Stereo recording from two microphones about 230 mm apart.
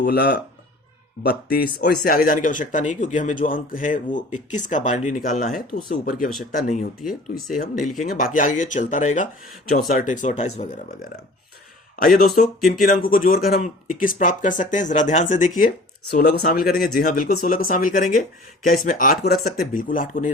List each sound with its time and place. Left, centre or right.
0.0 s speech: left
12.5 s speech: centre
12.8 s speech: left